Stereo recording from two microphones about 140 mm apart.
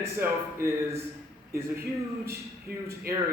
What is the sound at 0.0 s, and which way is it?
A man's voice, 20° right (ahead or behind).